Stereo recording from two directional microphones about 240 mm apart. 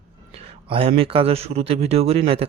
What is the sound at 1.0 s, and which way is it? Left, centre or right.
Speech, right.